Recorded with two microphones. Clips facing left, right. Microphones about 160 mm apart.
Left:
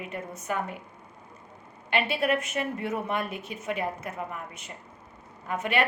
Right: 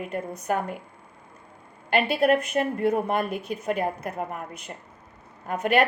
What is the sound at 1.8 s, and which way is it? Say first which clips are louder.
A woman's voice: right 5 dB; 40° right (ahead or behind).